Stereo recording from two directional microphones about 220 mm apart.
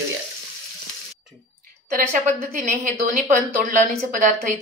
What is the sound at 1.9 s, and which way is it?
A woman's voice, 35° right (ahead or behind).